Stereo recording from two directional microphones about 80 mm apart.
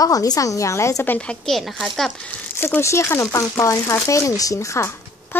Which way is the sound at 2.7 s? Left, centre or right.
Left.